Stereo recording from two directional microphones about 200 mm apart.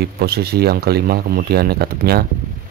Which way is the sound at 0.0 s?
50° right (ahead or behind).